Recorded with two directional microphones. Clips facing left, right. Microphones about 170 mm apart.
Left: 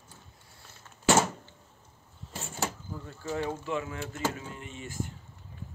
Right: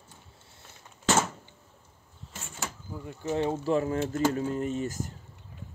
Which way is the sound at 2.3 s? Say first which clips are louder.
Left 5 dB; 35° left (ahead or behind).